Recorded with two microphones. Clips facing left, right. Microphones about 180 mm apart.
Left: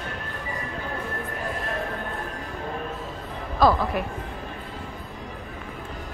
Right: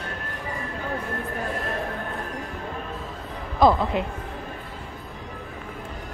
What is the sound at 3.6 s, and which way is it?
Speech, 20° right (ahead or behind).